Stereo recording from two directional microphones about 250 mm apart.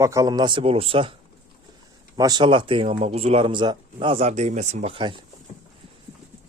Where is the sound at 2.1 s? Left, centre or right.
Centre.